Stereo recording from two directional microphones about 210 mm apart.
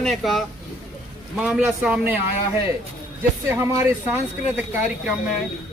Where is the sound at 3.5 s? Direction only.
10° right (ahead or behind).